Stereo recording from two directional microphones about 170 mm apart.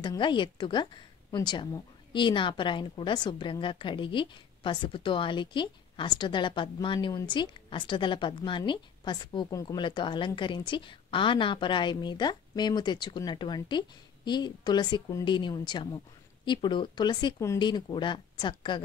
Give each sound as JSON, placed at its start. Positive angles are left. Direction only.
{"t": 0.0, "sound": "a woman's voice", "side_deg": 25}